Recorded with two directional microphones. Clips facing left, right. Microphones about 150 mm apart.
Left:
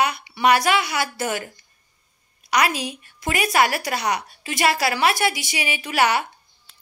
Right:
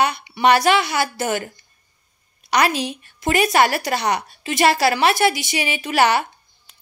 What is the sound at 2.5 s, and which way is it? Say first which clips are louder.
Speech: right 3 dB; 30° right (ahead or behind).